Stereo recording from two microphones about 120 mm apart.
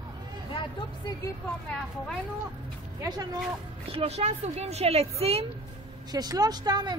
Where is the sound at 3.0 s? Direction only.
35° right (ahead or behind).